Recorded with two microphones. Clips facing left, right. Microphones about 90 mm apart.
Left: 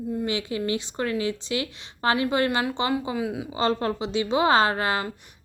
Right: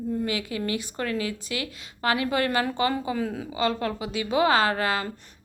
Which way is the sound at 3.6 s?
30° left (ahead or behind).